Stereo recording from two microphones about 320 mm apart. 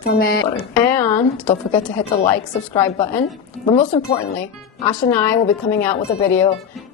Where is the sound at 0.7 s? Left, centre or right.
Centre.